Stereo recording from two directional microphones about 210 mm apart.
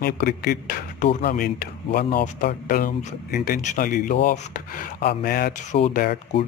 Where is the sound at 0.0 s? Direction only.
45° left (ahead or behind).